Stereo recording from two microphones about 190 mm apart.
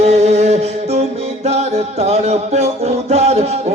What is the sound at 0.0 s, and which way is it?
Music, 35° right (ahead or behind).